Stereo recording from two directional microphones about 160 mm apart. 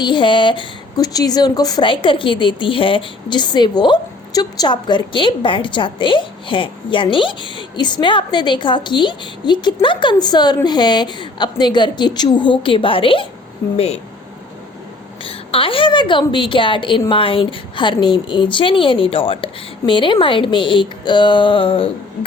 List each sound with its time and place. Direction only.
0.0 s a woman's voice: 30° left (ahead or behind)
15.2 s a woman's voice: 35° left (ahead or behind)